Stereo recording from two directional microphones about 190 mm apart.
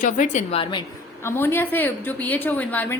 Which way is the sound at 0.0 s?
40° left (ahead or behind).